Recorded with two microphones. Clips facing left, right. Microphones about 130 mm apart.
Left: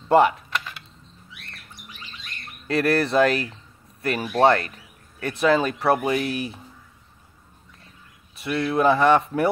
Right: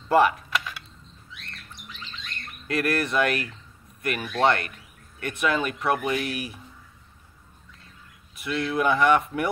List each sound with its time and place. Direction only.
0.1 s speech: 25° left (ahead or behind)
2.7 s speech: 30° left (ahead or behind)
8.4 s speech: 30° left (ahead or behind)